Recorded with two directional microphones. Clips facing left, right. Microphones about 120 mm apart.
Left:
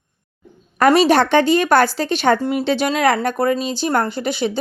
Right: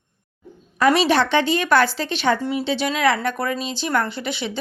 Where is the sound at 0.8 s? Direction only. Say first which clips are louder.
Left 4 dB; 50° left (ahead or behind).